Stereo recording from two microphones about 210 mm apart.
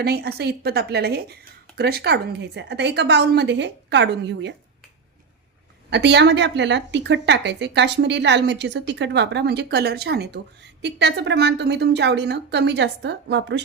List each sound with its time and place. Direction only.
0.0 s a woman's voice: 50° right (ahead or behind)
5.9 s a woman's voice: 55° right (ahead or behind)